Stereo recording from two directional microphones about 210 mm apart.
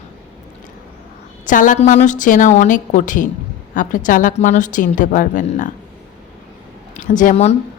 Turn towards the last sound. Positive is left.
turn(degrees=35)  # may be behind; listen again after turning